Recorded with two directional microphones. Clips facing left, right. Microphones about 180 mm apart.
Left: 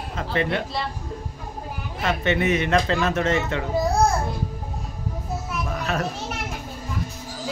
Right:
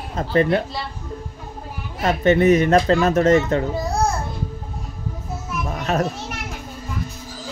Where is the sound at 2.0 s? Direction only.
40° right (ahead or behind).